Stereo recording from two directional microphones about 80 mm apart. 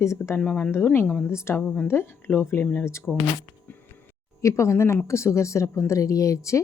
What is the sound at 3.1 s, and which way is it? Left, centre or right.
Speech, centre.